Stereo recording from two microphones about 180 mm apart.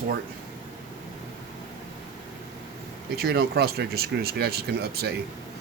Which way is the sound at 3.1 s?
60° right (ahead or behind).